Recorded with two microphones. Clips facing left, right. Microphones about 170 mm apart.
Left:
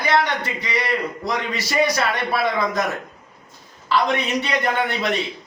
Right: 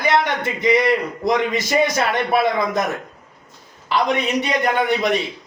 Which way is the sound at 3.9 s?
15° right (ahead or behind).